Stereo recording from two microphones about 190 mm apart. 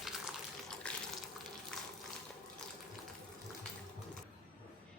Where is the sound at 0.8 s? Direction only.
5° left (ahead or behind).